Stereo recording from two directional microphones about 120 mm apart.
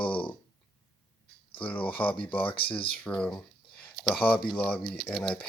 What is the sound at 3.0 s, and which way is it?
Speech, 10° left (ahead or behind).